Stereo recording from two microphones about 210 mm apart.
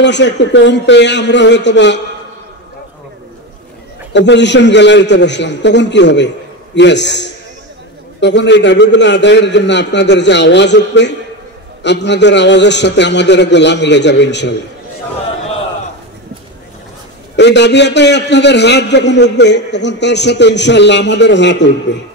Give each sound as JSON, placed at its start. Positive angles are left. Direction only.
{"t": 0.0, "sound": "a man's voice", "side_deg": 55}
{"t": 4.1, "sound": "a man's voice", "side_deg": 55}
{"t": 17.4, "sound": "a man's voice", "side_deg": 55}